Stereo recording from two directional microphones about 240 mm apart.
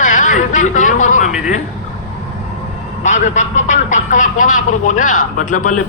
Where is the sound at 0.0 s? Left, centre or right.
Left.